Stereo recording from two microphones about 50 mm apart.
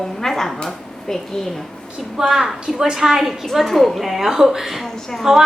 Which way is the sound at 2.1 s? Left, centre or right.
Centre.